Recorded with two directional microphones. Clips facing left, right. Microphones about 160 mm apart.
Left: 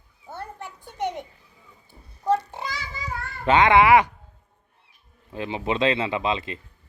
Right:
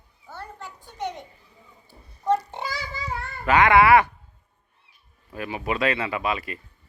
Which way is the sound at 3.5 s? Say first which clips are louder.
Even; 20° left (ahead or behind).